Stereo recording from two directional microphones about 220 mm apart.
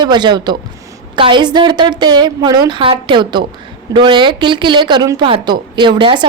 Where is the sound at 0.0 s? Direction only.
20° right (ahead or behind).